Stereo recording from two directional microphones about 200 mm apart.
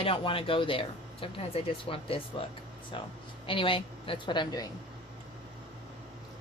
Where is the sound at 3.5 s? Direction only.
25° left (ahead or behind).